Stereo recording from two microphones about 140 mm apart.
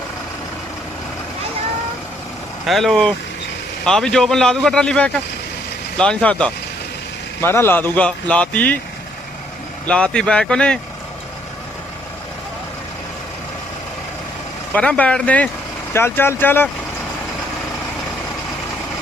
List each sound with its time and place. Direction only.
2.6 s speech: centre (ahead or behind)
9.8 s speech: 5° left (ahead or behind)
14.7 s speech: 10° left (ahead or behind)